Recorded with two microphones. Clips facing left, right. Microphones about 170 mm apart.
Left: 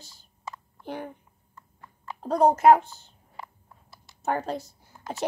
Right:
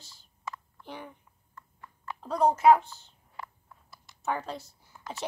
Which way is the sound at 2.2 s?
45° left (ahead or behind).